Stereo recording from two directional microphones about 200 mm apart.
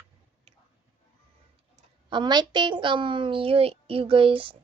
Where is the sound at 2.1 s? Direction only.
20° right (ahead or behind).